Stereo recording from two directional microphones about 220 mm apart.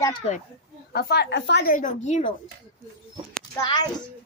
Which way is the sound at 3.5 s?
20° left (ahead or behind).